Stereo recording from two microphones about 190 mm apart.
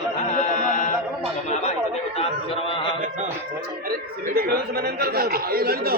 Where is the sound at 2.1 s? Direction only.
30° left (ahead or behind).